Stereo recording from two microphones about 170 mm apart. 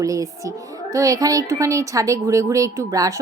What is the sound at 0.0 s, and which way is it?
Speech, 20° right (ahead or behind).